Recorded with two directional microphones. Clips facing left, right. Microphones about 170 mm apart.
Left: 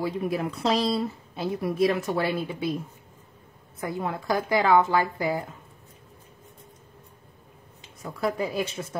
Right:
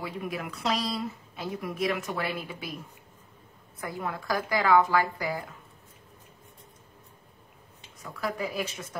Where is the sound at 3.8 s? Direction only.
25° left (ahead or behind).